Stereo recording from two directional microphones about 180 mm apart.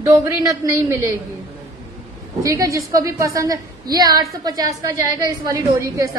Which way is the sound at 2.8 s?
20° right (ahead or behind).